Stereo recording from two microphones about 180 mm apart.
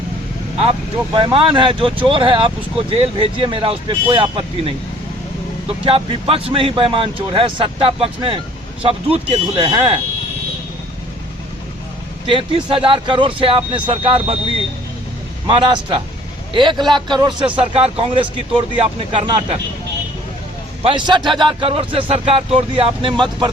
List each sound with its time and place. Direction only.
1.1 s speech: 30° right (ahead or behind)
12.2 s speech: 30° right (ahead or behind)
15.4 s speech: 25° right (ahead or behind)
20.8 s speech: 25° right (ahead or behind)